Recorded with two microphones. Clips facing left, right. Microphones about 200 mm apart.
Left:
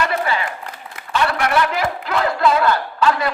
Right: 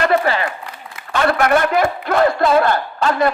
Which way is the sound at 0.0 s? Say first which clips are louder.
Right 5 dB; 50° right (ahead or behind).